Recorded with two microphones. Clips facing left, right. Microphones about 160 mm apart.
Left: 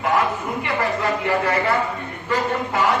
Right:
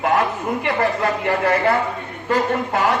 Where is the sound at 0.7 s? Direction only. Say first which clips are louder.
Left 1 dB; 50° right (ahead or behind).